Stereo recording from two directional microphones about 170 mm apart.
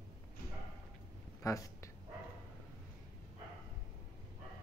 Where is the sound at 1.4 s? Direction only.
20° left (ahead or behind).